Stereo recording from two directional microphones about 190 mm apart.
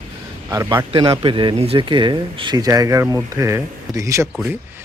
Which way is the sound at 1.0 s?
25° right (ahead or behind).